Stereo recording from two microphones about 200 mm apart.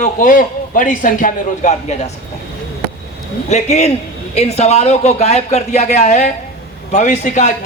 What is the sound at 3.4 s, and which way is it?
Speech, 35° left (ahead or behind).